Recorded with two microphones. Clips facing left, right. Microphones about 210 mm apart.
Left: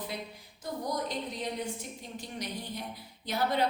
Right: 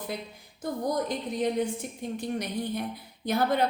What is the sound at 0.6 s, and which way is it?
A woman's voice, 55° right (ahead or behind).